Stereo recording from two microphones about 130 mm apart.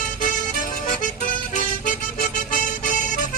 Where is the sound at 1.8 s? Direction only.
90° left.